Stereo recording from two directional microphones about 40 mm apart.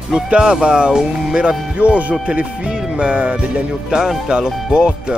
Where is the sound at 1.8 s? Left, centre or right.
Right.